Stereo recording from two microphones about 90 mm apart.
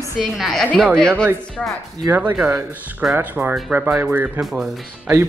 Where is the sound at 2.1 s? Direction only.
15° right (ahead or behind).